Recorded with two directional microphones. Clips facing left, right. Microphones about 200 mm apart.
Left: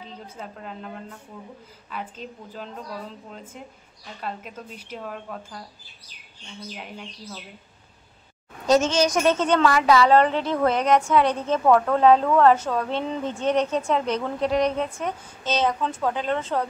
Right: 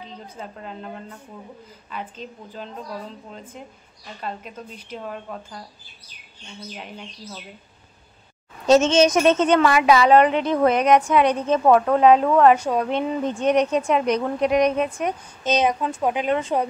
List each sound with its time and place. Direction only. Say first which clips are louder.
0.4 s speech: right 2 dB; centre (ahead or behind)
1.9 s speech: right 1 dB; 5° left (ahead or behind)
4.7 s speech: right 2 dB; 5° left (ahead or behind)
8.6 s a woman's voice: right 4 dB; 25° right (ahead or behind)